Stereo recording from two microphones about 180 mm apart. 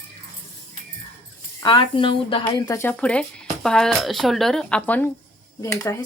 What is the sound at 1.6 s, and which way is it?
Speech, 25° left (ahead or behind).